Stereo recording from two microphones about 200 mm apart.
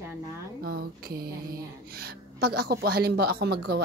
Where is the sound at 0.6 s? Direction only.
50° right (ahead or behind).